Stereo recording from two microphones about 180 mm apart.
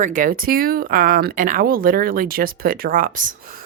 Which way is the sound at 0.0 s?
45° right (ahead or behind).